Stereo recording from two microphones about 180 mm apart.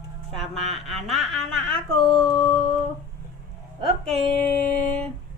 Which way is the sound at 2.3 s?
20° left (ahead or behind).